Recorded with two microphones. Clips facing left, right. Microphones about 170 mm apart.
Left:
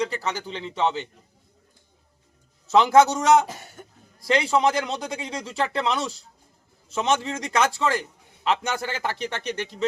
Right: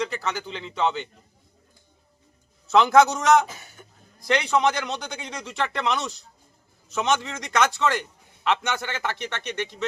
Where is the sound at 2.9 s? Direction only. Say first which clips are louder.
Left 1 dB; 30° left (ahead or behind).